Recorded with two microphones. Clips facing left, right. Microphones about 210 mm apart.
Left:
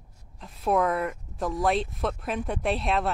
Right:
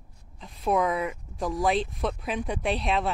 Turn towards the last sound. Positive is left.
turn(degrees=0)  # may be behind; listen again after turning